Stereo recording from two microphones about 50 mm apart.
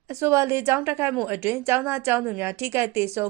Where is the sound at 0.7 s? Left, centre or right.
Right.